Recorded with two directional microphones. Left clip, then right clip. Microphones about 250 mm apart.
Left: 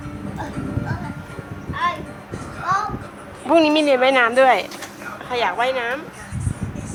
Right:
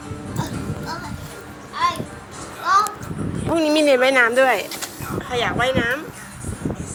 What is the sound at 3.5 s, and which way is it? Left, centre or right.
Speech, centre.